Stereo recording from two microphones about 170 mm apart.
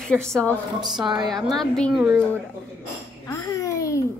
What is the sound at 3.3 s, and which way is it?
Babbling, 20° left (ahead or behind).